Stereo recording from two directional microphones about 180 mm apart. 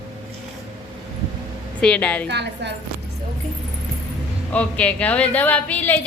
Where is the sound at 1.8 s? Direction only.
5° left (ahead or behind).